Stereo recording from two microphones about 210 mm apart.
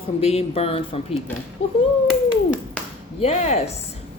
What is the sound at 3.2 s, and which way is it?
Speech, 30° left (ahead or behind).